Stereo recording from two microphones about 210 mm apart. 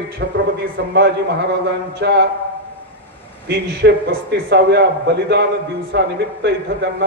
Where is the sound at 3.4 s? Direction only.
50° right (ahead or behind).